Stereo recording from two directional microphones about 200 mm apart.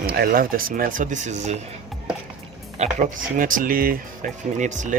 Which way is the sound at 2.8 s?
40° right (ahead or behind).